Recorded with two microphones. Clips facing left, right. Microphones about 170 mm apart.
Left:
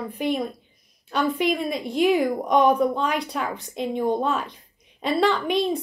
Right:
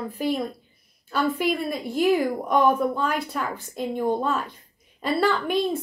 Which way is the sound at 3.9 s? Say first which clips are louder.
Left 1 dB; 20° left (ahead or behind).